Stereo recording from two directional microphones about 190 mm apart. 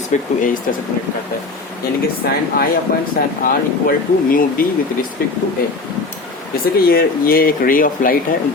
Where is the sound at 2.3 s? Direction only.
55° left (ahead or behind).